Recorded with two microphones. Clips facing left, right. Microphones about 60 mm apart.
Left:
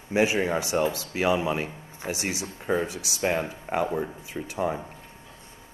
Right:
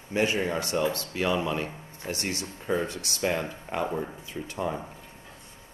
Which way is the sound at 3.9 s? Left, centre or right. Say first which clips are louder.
Left 2 dB; centre.